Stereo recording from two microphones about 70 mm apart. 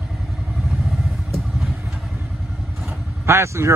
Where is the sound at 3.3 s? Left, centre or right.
Right.